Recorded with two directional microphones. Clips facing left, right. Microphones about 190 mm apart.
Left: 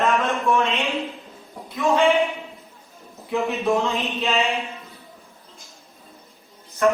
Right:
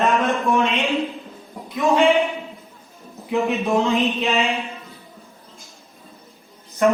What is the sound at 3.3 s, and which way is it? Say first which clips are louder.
Speech: right 2 dB; 15° right (ahead or behind).